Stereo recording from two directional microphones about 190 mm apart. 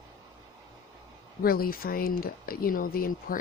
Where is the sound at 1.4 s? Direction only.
50° left (ahead or behind).